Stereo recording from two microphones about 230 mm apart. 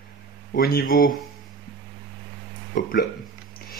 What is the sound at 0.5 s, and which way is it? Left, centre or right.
Speech, left.